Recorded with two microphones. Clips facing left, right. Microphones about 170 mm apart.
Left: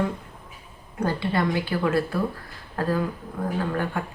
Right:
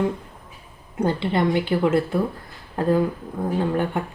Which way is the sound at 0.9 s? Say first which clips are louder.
Right 3 dB; 20° right (ahead or behind).